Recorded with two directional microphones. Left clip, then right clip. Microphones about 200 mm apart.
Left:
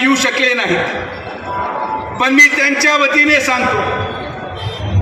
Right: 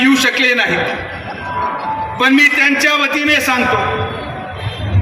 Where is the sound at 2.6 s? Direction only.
35° right (ahead or behind).